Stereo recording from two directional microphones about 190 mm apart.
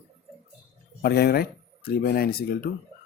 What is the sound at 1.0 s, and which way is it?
Speech, 55° left (ahead or behind).